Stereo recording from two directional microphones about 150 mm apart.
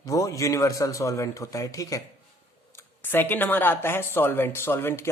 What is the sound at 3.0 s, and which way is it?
Speech, 15° left (ahead or behind).